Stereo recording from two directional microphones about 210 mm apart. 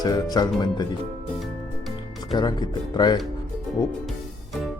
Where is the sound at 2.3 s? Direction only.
20° left (ahead or behind).